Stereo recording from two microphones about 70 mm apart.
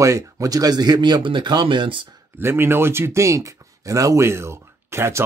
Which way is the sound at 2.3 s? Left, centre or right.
Right.